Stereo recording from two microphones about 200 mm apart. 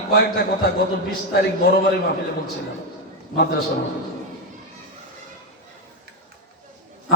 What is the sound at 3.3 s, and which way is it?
Speech, 50° left (ahead or behind).